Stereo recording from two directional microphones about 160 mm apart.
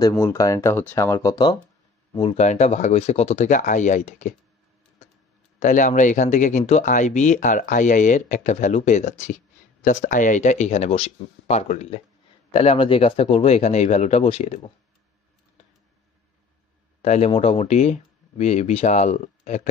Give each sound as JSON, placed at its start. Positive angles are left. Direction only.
{"t": 0.0, "sound": "speech", "side_deg": 20}
{"t": 2.1, "sound": "speech", "side_deg": 40}
{"t": 5.6, "sound": "speech", "side_deg": 50}
{"t": 17.0, "sound": "speech", "side_deg": 45}